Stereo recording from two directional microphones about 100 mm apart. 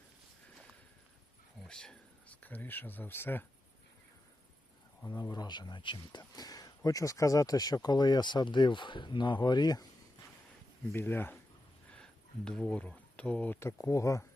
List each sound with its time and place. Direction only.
1.6 s speech: 5° left (ahead or behind)
5.0 s speech: 40° left (ahead or behind)
10.9 s speech: 20° left (ahead or behind)
12.5 s speech: 10° left (ahead or behind)
13.6 s speech: 30° left (ahead or behind)